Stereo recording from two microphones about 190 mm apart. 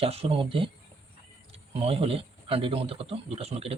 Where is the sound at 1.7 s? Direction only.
30° right (ahead or behind).